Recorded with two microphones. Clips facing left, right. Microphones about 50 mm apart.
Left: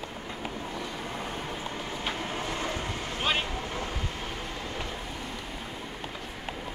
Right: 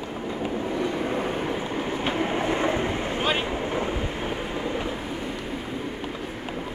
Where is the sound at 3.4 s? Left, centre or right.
Right.